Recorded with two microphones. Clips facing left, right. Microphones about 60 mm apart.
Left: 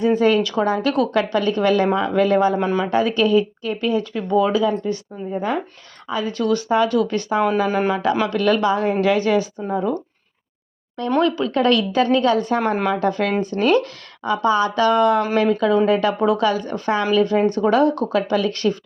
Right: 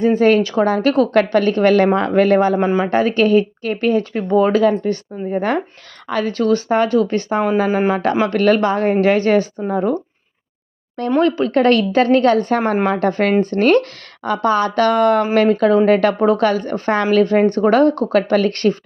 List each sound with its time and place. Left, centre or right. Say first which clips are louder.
0.0 s speech: right 3 dB; right
4.6 s a woman's voice: right 5 dB; right
11.2 s speech: right 4 dB; right